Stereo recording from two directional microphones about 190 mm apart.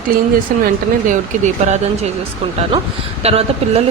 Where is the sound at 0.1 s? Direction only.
50° right (ahead or behind).